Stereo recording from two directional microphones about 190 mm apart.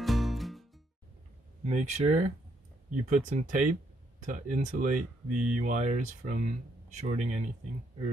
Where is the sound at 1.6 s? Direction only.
40° right (ahead or behind).